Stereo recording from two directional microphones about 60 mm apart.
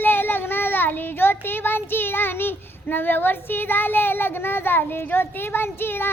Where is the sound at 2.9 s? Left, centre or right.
Left.